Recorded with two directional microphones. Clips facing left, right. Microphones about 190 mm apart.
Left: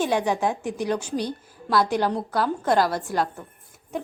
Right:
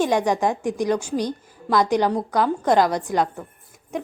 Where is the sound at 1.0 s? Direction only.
10° right (ahead or behind).